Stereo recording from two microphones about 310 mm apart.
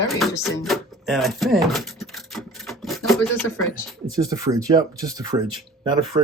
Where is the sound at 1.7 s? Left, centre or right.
Centre.